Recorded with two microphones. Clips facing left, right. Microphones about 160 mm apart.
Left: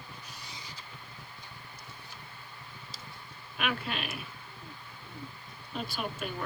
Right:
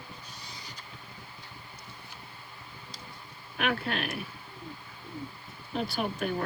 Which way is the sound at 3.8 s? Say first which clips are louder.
Right 4 dB; 60° right (ahead or behind).